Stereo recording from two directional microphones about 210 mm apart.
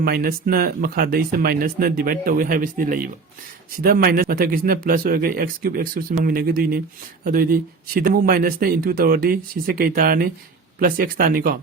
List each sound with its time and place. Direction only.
0.0 s speech: 45° right (ahead or behind)